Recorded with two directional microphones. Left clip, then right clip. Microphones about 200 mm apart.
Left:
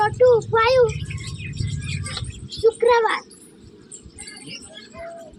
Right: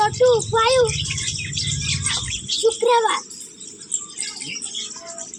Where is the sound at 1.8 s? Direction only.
50° left (ahead or behind).